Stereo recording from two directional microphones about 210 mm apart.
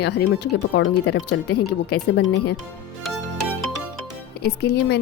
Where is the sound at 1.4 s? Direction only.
90° left.